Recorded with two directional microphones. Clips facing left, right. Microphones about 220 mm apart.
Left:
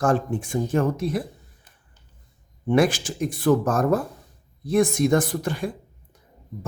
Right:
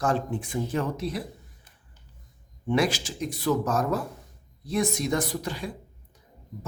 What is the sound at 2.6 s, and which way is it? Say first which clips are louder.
Speech: left 5 dB; 50° left (ahead or behind).